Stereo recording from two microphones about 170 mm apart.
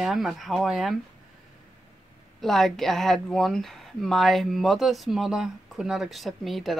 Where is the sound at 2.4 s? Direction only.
Centre (ahead or behind).